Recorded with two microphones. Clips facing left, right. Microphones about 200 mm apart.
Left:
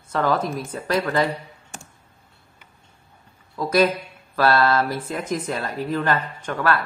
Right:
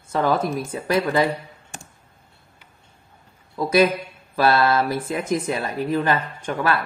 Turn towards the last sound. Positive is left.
turn(degrees=-15)  # may be behind; listen again after turning